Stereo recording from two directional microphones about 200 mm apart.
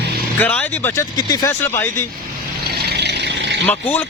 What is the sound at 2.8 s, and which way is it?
Vehicle, 55° right (ahead or behind).